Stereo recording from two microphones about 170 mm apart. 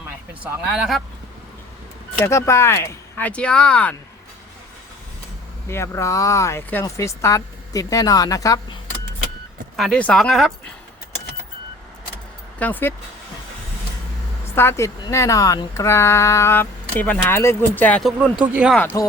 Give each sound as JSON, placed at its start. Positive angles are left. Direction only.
{"t": 0.7, "sound": "speech", "side_deg": 0}
{"t": 2.2, "sound": "speech", "side_deg": 15}
{"t": 5.6, "sound": "speech", "side_deg": 15}
{"t": 9.7, "sound": "speech", "side_deg": 5}
{"t": 12.5, "sound": "speech", "side_deg": 10}
{"t": 14.5, "sound": "speech", "side_deg": 15}
{"t": 18.4, "sound": "speech", "side_deg": -10}